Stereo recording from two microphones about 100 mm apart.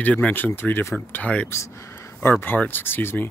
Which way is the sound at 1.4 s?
25° left (ahead or behind).